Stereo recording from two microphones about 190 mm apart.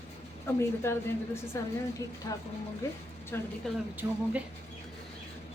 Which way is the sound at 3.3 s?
10° left (ahead or behind).